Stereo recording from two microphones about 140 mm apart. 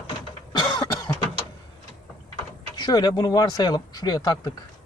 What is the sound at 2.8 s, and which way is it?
Speech, 30° left (ahead or behind).